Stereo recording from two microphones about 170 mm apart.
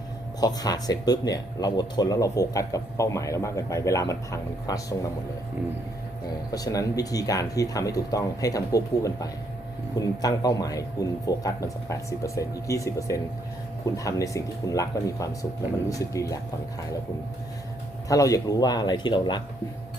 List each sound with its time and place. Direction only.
0.3 s a man's voice: 20° left (ahead or behind)
6.5 s a man's voice: 20° left (ahead or behind)
18.1 s a man's voice: 20° left (ahead or behind)